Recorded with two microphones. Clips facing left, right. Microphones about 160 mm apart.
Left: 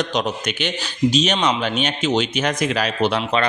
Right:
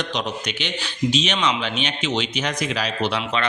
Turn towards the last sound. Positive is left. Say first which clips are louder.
# left 4 dB
turn(degrees=45)  # may be behind; listen again after turning